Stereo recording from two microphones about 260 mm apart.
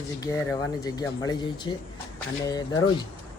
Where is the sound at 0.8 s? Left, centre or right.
Centre.